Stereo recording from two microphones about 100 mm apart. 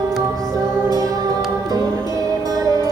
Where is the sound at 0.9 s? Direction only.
35° right (ahead or behind).